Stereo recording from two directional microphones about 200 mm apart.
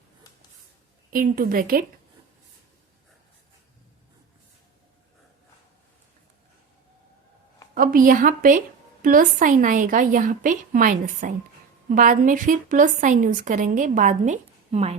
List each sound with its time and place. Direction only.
1.1 s a woman's voice: 45° right (ahead or behind)
7.8 s a woman's voice: 45° right (ahead or behind)